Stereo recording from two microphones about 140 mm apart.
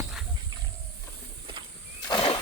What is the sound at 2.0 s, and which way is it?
Wild animals, 35° left (ahead or behind).